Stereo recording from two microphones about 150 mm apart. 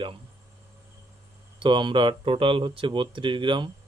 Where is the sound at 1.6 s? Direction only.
35° right (ahead or behind).